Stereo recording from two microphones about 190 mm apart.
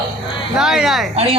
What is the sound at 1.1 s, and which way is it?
Speech, 30° right (ahead or behind).